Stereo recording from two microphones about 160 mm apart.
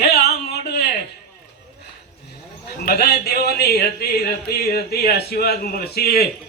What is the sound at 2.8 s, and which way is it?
A man's voice, 80° left.